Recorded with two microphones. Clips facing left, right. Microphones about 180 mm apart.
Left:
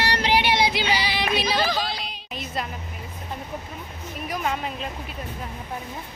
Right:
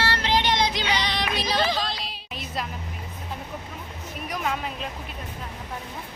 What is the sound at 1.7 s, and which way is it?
Music, centre (ahead or behind).